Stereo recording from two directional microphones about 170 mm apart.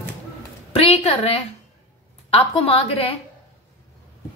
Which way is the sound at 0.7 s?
35° left (ahead or behind).